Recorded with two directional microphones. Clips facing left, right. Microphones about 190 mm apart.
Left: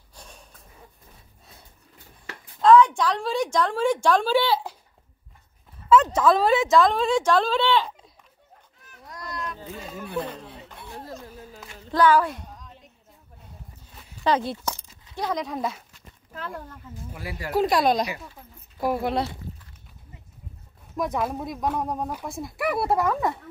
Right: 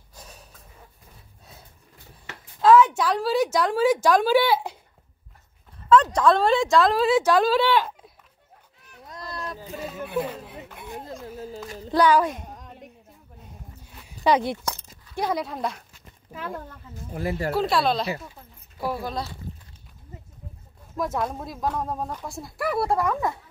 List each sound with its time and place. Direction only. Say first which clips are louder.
0.1 s gasp: right 1 dB; 5° right (ahead or behind)
2.6 s a woman's voice: even; 5° right (ahead or behind)
6.1 s speech: even; 5° left (ahead or behind)
9.0 s a sound: even; 25° right (ahead or behind)
9.6 s a sound: right 3 dB; 10° right (ahead or behind)
11.5 s child singing: right 8 dB; 40° right (ahead or behind)
11.9 s a woman's voice: even; 15° right (ahead or behind)
14.0 s a sound: right 2 dB; 15° right (ahead or behind)
15.1 s speech: right 1 dB; 10° right (ahead or behind)
16.3 s speech: right 2 dB; 10° right (ahead or behind)
17.1 s speech: right 9 dB; 45° right (ahead or behind)
17.5 s speech: left 3 dB; 15° left (ahead or behind)
20.9 s speech: left 1 dB; centre (ahead or behind)